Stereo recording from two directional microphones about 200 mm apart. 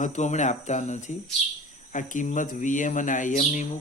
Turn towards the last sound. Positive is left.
turn(degrees=35)  # may be behind; listen again after turning